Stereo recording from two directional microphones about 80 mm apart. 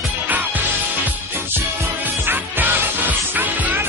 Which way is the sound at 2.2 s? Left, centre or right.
Right.